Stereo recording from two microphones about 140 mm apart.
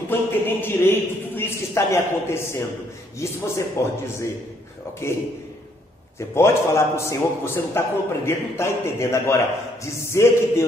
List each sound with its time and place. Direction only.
0.1 s a man's voice: 15° left (ahead or behind)